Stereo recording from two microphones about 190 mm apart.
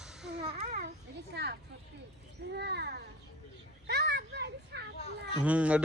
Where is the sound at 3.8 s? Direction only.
60° right (ahead or behind).